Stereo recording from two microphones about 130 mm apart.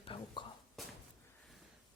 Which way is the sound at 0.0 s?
40° left (ahead or behind).